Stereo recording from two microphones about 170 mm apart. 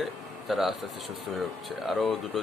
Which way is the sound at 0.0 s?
Centre (ahead or behind).